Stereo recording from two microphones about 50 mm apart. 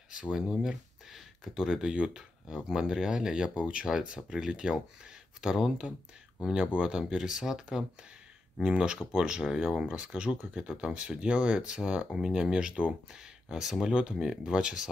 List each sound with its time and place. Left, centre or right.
0.1 s speech: centre
8.5 s speech: centre
13.2 s speech: centre